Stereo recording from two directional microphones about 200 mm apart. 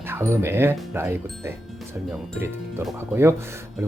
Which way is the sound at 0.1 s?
10° right (ahead or behind).